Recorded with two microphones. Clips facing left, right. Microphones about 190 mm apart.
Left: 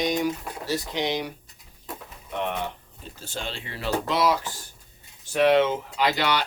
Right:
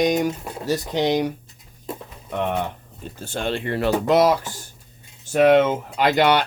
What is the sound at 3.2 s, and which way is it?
Speech, 55° right (ahead or behind).